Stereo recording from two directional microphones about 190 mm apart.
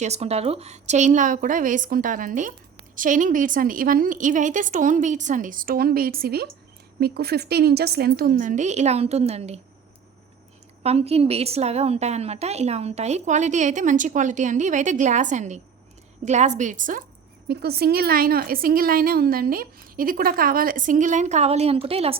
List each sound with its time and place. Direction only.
0.0 s a woman's voice: 35° right (ahead or behind)
10.8 s a woman's voice: 35° right (ahead or behind)
17.5 s a woman's voice: 55° right (ahead or behind); by 22.2 s 30° right (ahead or behind)